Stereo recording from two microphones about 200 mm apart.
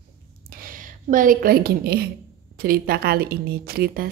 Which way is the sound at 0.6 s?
40° right (ahead or behind).